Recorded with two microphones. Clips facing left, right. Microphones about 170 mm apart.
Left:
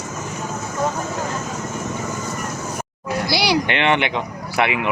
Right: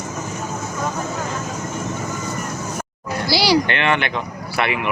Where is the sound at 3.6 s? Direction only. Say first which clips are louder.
Left 1 dB; 20° left (ahead or behind).